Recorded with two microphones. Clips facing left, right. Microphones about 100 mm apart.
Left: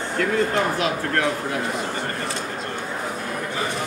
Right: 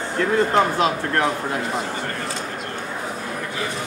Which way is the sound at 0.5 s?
30° right (ahead or behind).